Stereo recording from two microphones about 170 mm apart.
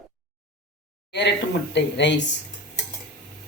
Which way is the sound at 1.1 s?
90° left.